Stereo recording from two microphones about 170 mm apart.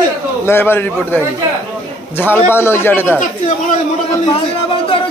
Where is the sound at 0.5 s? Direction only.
15° left (ahead or behind).